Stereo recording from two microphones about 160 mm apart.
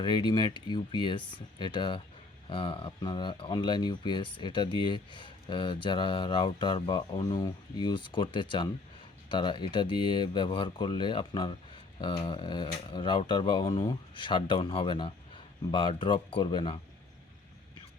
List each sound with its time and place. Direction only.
0.0 s speech: 30° left (ahead or behind)